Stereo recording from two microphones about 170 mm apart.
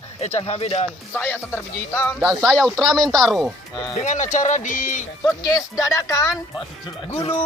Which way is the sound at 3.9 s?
45° left (ahead or behind).